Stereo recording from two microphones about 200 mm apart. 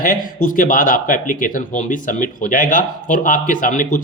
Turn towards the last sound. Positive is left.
turn(degrees=40)  # may be behind; listen again after turning